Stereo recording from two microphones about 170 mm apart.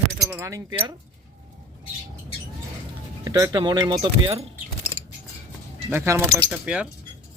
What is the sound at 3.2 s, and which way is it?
Speech, 20° right (ahead or behind).